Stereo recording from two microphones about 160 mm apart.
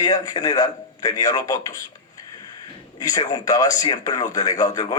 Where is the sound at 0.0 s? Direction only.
25° left (ahead or behind).